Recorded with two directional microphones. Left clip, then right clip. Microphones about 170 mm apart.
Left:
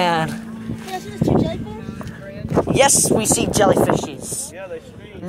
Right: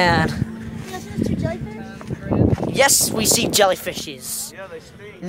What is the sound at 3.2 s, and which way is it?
Speech, 20° right (ahead or behind).